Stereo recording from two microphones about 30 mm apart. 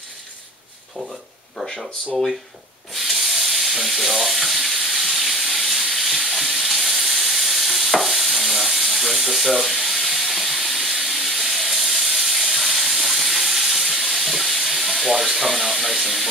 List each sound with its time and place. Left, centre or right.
2.9 s frying: centre